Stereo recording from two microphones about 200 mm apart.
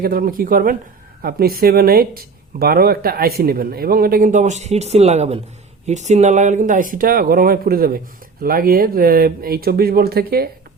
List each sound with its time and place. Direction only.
0.0 s speech: 45° right (ahead or behind)